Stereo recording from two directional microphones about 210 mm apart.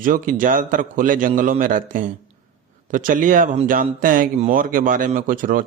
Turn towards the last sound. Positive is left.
turn(degrees=-40)  # may be behind; listen again after turning